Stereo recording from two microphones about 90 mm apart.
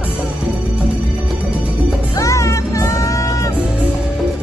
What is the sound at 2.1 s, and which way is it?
Music, 35° left (ahead or behind).